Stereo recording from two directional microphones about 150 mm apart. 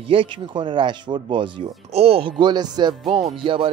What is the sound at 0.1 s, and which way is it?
Speech, 35° right (ahead or behind).